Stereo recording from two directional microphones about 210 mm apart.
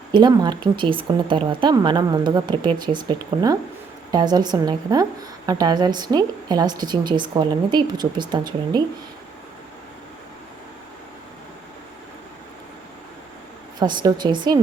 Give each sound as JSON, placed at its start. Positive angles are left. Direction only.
{"t": 0.1, "sound": "speech", "side_deg": -20}
{"t": 13.7, "sound": "speech", "side_deg": -20}